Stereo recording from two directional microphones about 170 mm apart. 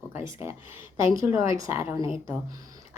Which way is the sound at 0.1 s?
15° right (ahead or behind).